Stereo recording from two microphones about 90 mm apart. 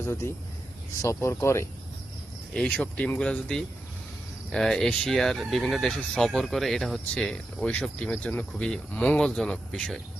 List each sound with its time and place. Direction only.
0.0 s speech: 30° left (ahead or behind)
2.5 s speech: 10° left (ahead or behind)